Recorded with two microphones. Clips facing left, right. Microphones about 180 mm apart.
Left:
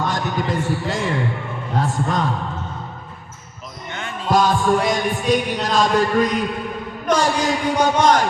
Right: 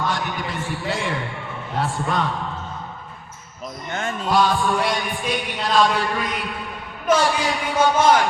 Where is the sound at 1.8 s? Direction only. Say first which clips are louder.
Left 1 dB; 40° left (ahead or behind).